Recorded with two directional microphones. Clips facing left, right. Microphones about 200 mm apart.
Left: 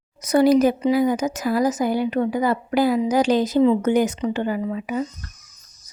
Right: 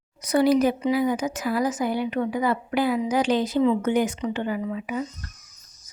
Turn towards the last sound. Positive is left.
turn(degrees=40)  # may be behind; listen again after turning